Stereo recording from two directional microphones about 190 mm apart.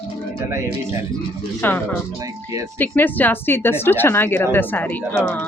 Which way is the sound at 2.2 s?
15° right (ahead or behind).